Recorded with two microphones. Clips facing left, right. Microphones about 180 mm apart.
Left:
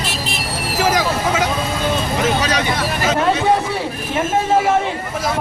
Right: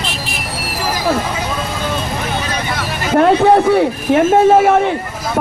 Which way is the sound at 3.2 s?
55° right (ahead or behind).